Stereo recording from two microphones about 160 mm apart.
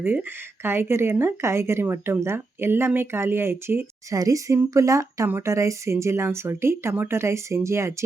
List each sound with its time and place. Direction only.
0.0 s speech: 15° right (ahead or behind)